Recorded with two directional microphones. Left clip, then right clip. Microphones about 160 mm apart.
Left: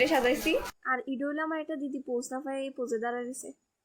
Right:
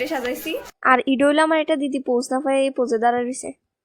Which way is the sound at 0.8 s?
65° right (ahead or behind).